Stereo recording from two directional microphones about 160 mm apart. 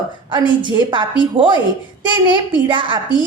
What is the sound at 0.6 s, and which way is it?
Speech, 30° right (ahead or behind).